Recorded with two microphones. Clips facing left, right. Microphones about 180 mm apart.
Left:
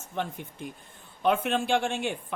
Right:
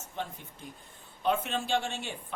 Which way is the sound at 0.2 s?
65° left (ahead or behind).